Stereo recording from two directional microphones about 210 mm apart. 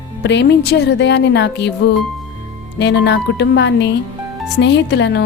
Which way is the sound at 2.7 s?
55° left (ahead or behind).